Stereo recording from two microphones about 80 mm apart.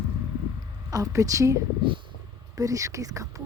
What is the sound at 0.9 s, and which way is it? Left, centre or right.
Speech, right.